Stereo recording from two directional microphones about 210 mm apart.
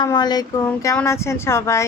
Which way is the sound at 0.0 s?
20° left (ahead or behind).